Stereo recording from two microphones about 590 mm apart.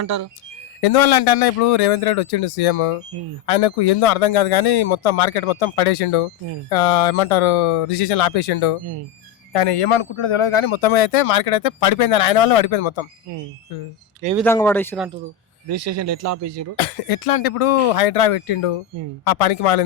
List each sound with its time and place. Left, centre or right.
0.0 s speech: right
0.8 s speech: left
14.3 s speech: centre
15.7 s speech: right
16.7 s speech: left